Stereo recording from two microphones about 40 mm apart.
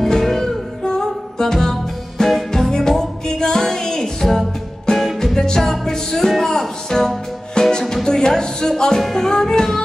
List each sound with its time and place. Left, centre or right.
0.0 s music: centre